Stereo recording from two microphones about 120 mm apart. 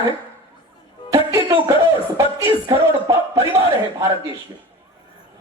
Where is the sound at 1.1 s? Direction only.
25° right (ahead or behind).